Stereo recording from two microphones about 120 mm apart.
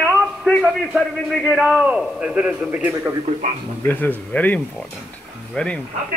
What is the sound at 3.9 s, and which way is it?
Speech, 15° left (ahead or behind).